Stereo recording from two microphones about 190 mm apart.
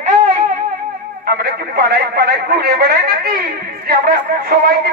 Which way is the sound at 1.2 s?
50° right (ahead or behind).